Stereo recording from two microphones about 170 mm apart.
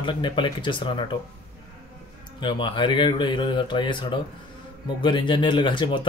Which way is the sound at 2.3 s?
30° left (ahead or behind).